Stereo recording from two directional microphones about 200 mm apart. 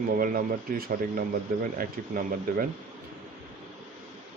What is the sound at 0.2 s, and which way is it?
A man's voice, 45° right (ahead or behind).